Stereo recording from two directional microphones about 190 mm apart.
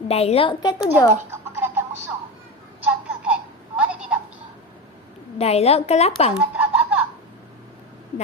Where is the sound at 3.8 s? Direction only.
5° right (ahead or behind).